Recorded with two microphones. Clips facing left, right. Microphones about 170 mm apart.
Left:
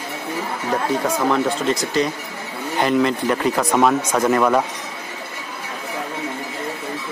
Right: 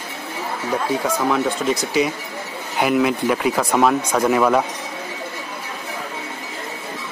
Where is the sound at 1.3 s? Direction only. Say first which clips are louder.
Even; centre (ahead or behind).